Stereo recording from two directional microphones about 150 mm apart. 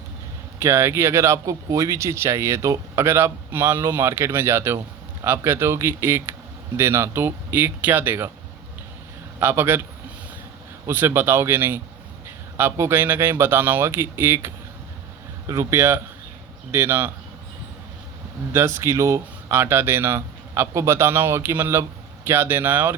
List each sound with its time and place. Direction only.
0.6 s speech: 15° right (ahead or behind)
9.4 s speech: 15° right (ahead or behind)
10.8 s speech: 15° right (ahead or behind)
18.5 s speech: 15° right (ahead or behind)